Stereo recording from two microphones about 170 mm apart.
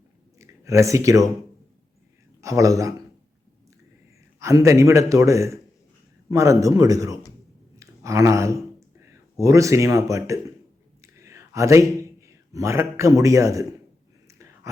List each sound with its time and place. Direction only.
0.3 s speech: 20° right (ahead or behind)
2.4 s a man's voice: 20° right (ahead or behind)
4.4 s a man's voice: 20° right (ahead or behind)
7.8 s a sound: 15° right (ahead or behind)
9.4 s a man's voice: 20° right (ahead or behind)
11.0 s a sound: 15° right (ahead or behind)